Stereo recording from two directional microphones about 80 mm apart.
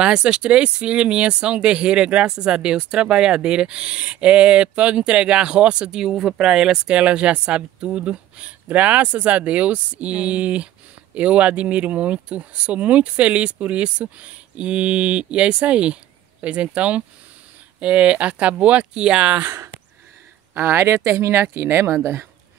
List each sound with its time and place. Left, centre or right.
0.0 s speech: centre
19.4 s speech: right
20.5 s speech: right